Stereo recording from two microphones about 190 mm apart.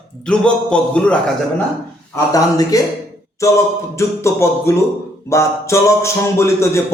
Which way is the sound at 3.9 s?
15° left (ahead or behind).